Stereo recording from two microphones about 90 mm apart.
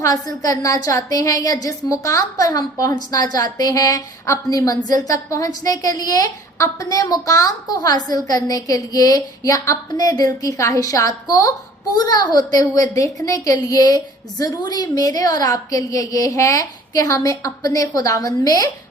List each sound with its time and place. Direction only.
0.0 s a woman's voice: 40° left (ahead or behind)